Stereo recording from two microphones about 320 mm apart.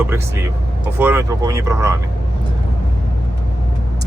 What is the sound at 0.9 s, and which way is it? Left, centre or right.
Speech, centre.